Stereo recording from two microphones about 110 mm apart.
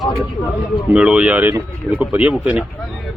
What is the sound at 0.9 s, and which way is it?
Speech, 10° right (ahead or behind).